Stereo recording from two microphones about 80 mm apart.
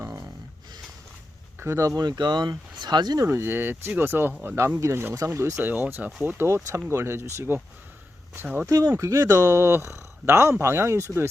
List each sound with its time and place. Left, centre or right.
1.5 s speech: right
2.0 s speech: right
3.2 s speech: right
5.6 s speech: right
8.6 s speech: right